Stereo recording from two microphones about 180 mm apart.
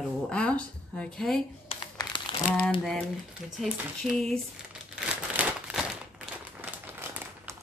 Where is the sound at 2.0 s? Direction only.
25° left (ahead or behind).